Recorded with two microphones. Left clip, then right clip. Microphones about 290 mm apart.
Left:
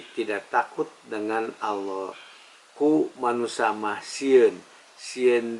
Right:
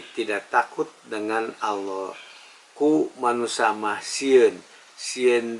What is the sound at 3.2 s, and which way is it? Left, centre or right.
Speech, centre.